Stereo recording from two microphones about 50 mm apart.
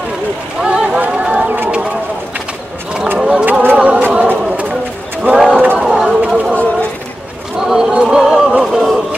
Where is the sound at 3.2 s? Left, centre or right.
Right.